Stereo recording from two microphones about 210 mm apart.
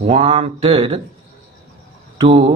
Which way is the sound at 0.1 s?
30° right (ahead or behind).